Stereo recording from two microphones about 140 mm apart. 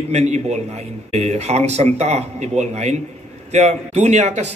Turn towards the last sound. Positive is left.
turn(degrees=-50)  # may be behind; listen again after turning